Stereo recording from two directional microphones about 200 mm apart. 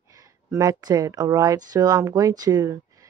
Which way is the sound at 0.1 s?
15° right (ahead or behind).